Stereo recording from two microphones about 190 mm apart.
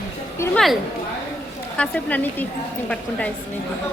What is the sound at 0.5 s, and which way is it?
A woman's voice, centre (ahead or behind).